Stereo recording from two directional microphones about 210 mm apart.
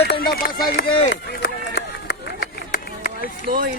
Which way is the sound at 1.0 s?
50° left (ahead or behind).